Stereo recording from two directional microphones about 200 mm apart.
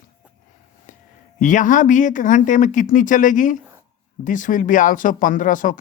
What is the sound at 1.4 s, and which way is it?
Speech, 40° left (ahead or behind).